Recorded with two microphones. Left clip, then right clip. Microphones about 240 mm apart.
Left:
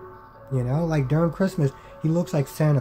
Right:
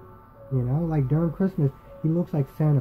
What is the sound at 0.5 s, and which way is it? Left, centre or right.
Speech, centre.